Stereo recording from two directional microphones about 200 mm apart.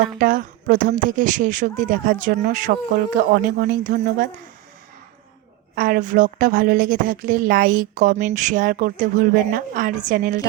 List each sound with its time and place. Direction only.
0.2 s speech: 40° right (ahead or behind)
5.7 s speech: 45° right (ahead or behind)